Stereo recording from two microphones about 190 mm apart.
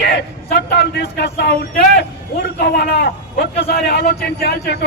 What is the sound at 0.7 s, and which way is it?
A man's voice, 65° left (ahead or behind).